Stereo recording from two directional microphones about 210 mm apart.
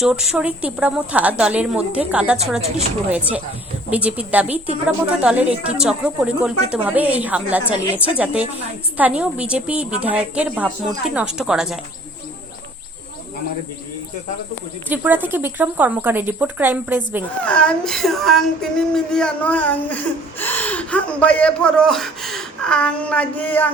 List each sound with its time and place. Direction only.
0.0 s a woman's voice: centre (ahead or behind)
2.6 s a woman's voice: 30° right (ahead or behind)
3.1 s a woman's voice: 5° right (ahead or behind)
14.8 s speech: 10° right (ahead or behind)
17.4 s a woman's voice: 5° left (ahead or behind)